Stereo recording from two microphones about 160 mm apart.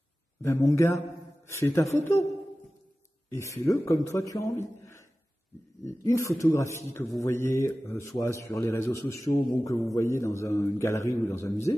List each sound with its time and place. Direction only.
0.4 s a man's voice: 15° left (ahead or behind)
3.6 s speech: 20° left (ahead or behind)
6.0 s a man's voice: 20° left (ahead or behind)